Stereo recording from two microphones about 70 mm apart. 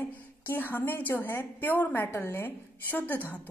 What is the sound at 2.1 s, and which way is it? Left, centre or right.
A woman's voice, left.